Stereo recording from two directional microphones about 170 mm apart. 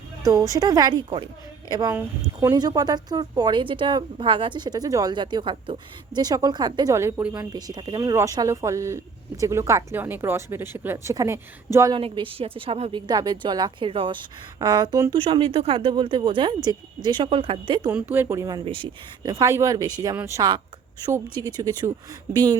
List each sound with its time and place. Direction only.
0.3 s a woman's voice: 20° right (ahead or behind)
7.5 s a woman's voice: 25° right (ahead or behind)
11.9 s speech: 30° right (ahead or behind)
13.1 s a woman's voice: 25° right (ahead or behind)
15.2 s a woman's voice: 30° right (ahead or behind)
17.9 s a woman's voice: 10° right (ahead or behind)